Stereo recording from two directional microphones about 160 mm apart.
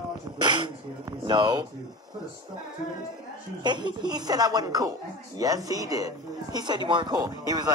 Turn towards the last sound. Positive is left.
turn(degrees=-25)  # may be behind; listen again after turning